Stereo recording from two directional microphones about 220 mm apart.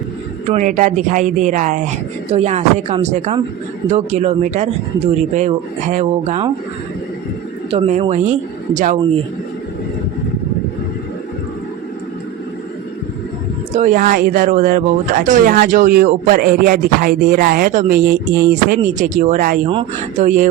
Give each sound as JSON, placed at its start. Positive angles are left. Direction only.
{"t": 0.5, "sound": "speech", "side_deg": -35}
{"t": 5.9, "sound": "speech", "side_deg": -30}
{"t": 7.7, "sound": "speech", "side_deg": -30}
{"t": 13.7, "sound": "speech", "side_deg": -35}